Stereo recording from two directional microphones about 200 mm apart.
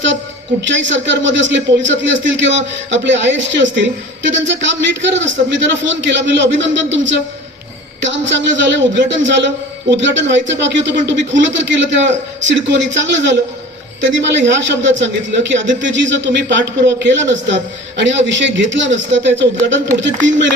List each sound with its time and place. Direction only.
0.6 s a man's voice: 65° right (ahead or behind)